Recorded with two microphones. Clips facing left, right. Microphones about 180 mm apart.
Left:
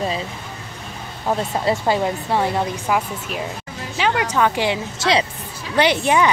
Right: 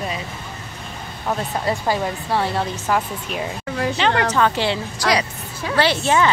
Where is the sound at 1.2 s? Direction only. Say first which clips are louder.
Left 2 dB; 25° left (ahead or behind).